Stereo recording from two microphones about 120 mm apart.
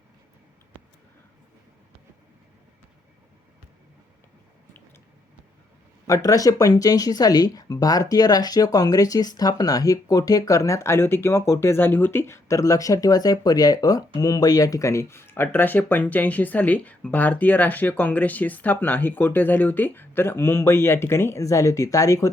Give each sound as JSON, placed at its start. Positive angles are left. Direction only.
{"t": 6.1, "sound": "speech", "side_deg": 30}